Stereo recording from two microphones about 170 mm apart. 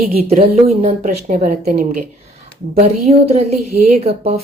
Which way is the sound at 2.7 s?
40° right (ahead or behind).